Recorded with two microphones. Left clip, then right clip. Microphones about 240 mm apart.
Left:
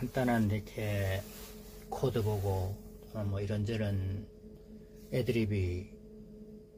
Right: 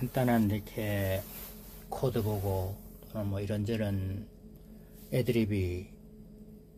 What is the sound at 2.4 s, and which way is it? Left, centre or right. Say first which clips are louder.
A man's voice: right 2 dB; right.